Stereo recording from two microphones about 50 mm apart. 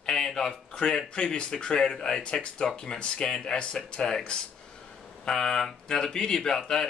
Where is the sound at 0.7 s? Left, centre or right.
Centre.